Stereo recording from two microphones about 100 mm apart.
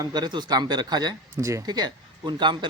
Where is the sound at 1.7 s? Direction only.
45° right (ahead or behind).